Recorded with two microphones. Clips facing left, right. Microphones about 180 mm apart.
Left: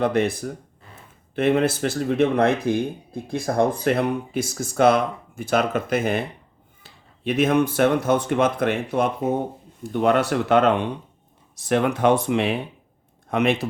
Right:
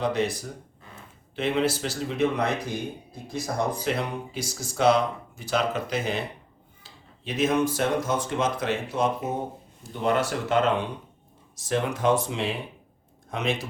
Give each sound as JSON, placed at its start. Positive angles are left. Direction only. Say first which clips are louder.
{"t": 0.0, "sound": "speech", "louder": "left 5 dB", "side_deg": 55}